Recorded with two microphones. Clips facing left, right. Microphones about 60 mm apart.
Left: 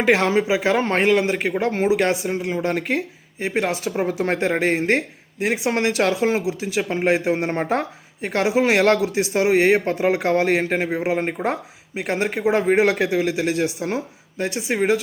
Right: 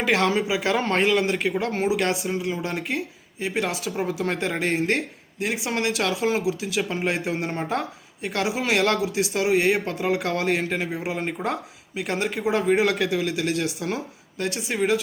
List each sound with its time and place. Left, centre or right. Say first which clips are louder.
0.0 s speech: left 4 dB; left